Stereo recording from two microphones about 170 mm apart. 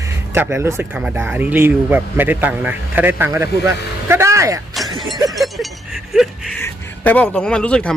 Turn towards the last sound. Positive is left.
turn(degrees=5)  # may be behind; listen again after turning